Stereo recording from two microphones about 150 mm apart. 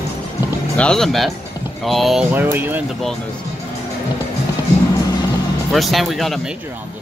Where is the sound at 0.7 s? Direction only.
5° left (ahead or behind).